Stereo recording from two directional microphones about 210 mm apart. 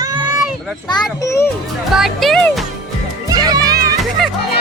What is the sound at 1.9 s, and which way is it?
Music, centre (ahead or behind).